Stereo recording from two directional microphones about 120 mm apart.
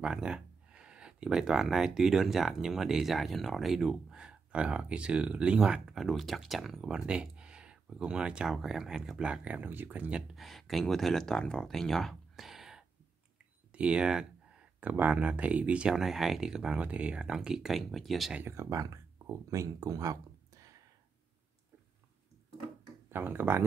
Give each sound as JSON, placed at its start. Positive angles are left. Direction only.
{"t": 0.0, "sound": "a sound", "side_deg": -5}
{"t": 2.0, "sound": "speech", "side_deg": -5}
{"t": 10.3, "sound": "speech", "side_deg": 0}
{"t": 18.4, "sound": "speech", "side_deg": -25}
{"t": 23.0, "sound": "speech", "side_deg": -20}